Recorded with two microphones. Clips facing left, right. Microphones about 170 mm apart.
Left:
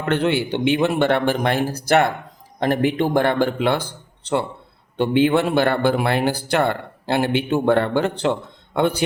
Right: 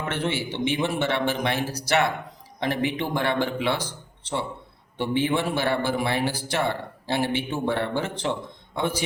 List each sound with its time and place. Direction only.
0.0 s a man's voice: 65° left (ahead or behind)